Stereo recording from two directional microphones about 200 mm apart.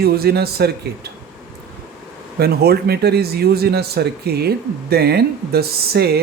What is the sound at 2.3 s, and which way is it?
Speech, 50° right (ahead or behind).